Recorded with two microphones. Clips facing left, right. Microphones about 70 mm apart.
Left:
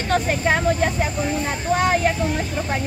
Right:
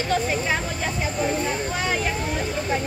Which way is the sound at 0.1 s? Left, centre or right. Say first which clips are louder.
Left 5 dB; left.